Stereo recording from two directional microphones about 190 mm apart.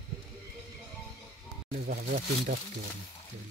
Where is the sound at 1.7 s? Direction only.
50° right (ahead or behind).